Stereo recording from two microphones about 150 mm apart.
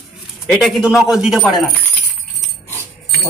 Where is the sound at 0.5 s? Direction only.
5° right (ahead or behind).